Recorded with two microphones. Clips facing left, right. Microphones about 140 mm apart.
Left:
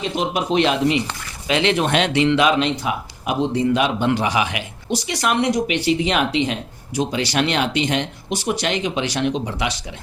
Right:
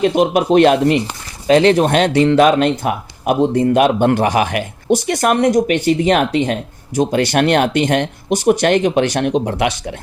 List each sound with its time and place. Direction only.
0.0 s speech: 55° right (ahead or behind)